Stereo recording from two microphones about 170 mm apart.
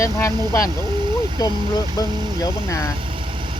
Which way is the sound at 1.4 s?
25° left (ahead or behind).